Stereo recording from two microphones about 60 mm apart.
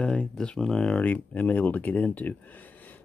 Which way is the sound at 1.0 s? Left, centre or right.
Left.